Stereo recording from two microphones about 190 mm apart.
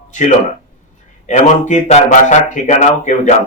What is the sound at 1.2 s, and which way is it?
Speech, 40° left (ahead or behind).